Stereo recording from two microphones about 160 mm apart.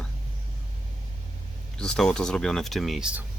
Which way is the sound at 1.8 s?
5° left (ahead or behind).